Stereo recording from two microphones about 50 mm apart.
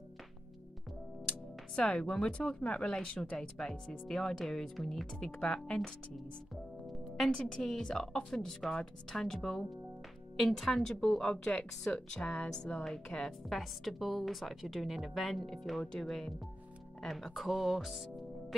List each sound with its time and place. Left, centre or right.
1.8 s speech: centre
7.6 s a woman's voice: centre
11.2 s a woman's voice: centre